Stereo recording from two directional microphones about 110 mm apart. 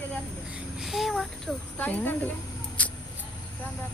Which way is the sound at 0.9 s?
Centre (ahead or behind).